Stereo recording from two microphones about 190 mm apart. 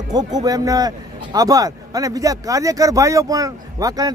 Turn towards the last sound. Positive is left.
turn(degrees=-20)  # may be behind; listen again after turning